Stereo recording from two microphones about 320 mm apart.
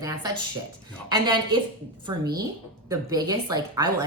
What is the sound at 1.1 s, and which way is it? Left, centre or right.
A woman's voice, centre.